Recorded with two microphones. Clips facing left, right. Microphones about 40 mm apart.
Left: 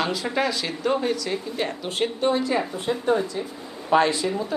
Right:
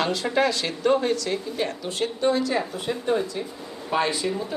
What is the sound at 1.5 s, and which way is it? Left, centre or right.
Speech, left.